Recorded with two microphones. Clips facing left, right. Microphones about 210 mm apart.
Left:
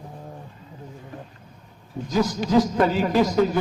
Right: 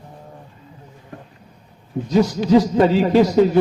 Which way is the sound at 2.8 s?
25° right (ahead or behind).